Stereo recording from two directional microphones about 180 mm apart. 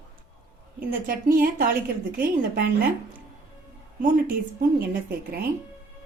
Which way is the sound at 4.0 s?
50° right (ahead or behind).